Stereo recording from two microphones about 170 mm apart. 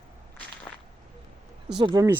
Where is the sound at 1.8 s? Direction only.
25° right (ahead or behind).